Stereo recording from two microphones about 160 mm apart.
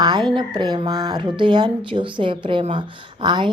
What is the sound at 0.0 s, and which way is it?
A woman's voice, 25° right (ahead or behind).